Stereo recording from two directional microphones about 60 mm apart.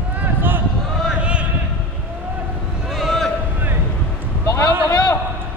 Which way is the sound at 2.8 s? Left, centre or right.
Centre.